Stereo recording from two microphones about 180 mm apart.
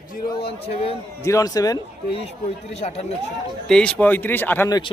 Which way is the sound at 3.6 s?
5° left (ahead or behind).